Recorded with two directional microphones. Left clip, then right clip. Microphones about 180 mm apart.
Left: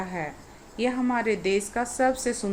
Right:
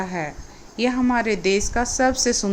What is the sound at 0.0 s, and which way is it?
Speech, 25° right (ahead or behind).